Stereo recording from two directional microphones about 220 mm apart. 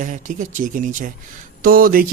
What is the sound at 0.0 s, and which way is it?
Speech, 35° right (ahead or behind).